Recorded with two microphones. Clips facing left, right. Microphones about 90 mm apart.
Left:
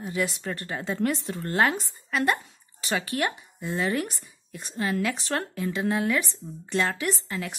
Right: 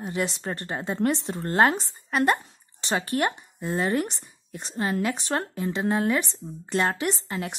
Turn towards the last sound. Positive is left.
turn(degrees=-25)  # may be behind; listen again after turning